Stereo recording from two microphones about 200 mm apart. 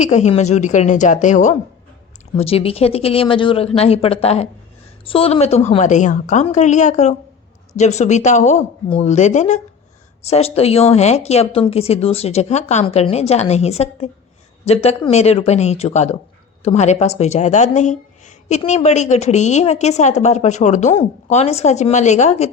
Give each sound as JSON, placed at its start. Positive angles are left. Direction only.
{"t": 0.0, "sound": "a woman's voice", "side_deg": 35}